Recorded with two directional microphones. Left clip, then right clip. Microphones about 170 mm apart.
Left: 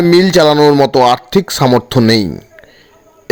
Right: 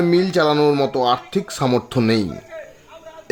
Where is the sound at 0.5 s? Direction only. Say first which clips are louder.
Left 8 dB; 30° left (ahead or behind).